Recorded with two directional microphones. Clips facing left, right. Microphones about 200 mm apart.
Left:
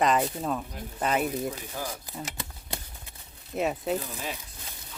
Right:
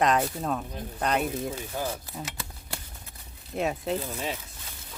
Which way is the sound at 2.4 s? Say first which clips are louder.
Left 1 dB; 20° left (ahead or behind).